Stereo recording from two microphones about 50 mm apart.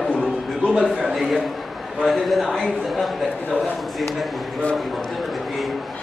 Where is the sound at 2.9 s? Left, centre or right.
Centre.